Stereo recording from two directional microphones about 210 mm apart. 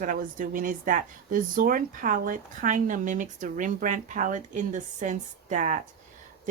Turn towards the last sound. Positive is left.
turn(degrees=-35)  # may be behind; listen again after turning